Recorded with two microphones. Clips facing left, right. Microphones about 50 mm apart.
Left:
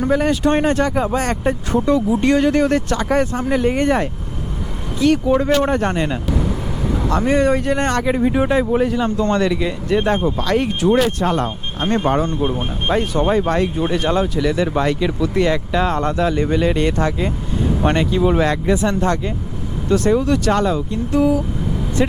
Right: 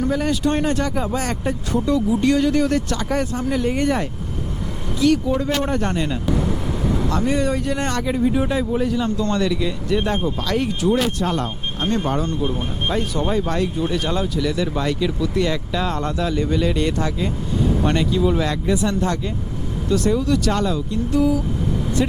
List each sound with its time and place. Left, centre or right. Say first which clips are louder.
0.0 s speech: left 4 dB; left
6.3 s vehicle: left 1 dB; centre
7.1 s speech: left 7 dB; left